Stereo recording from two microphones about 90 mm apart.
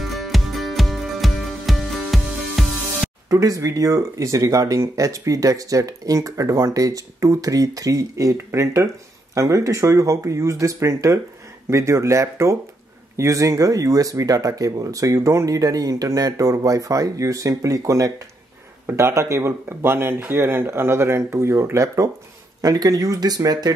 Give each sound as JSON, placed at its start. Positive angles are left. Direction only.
{"t": 0.0, "sound": "music", "side_deg": 0}
{"t": 3.3, "sound": "speech", "side_deg": -40}